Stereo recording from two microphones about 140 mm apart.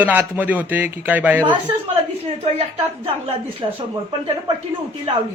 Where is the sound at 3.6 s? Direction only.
35° right (ahead or behind).